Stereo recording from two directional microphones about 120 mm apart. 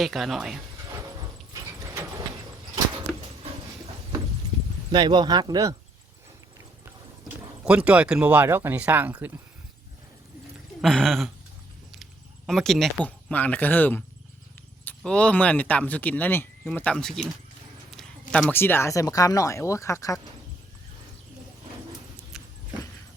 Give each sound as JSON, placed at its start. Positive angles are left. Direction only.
{"t": 0.0, "sound": "speech", "side_deg": 0}
{"t": 1.5, "sound": "a sound", "side_deg": -30}
{"t": 4.9, "sound": "speech", "side_deg": -40}
{"t": 7.3, "sound": "speech", "side_deg": -10}
{"t": 10.8, "sound": "speech", "side_deg": 5}
{"t": 12.5, "sound": "speech", "side_deg": 5}
{"t": 17.9, "sound": "a sound", "side_deg": 5}
{"t": 18.5, "sound": "speech", "side_deg": 20}
{"t": 22.3, "sound": "vehicle", "side_deg": -5}